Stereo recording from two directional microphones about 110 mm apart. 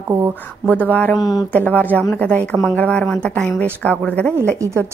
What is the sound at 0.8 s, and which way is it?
Speech, 15° left (ahead or behind).